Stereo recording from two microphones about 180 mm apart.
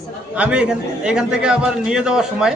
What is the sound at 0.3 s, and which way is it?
A man's voice, 5° right (ahead or behind).